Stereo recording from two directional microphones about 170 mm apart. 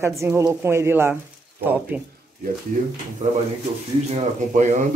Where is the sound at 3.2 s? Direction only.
45° right (ahead or behind).